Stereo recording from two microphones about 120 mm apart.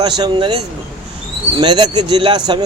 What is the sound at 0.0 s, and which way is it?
Speech, 40° right (ahead or behind).